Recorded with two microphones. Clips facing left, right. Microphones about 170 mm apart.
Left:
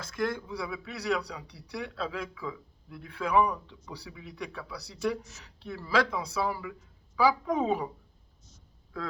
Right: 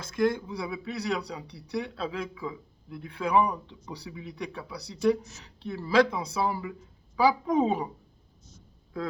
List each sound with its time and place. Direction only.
0.0 s speech: 20° right (ahead or behind)